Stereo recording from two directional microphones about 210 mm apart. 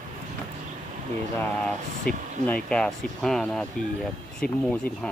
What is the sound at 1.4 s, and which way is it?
Speech, 5° left (ahead or behind).